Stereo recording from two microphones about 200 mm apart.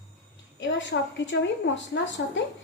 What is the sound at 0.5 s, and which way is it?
A woman's voice, 65° left (ahead or behind).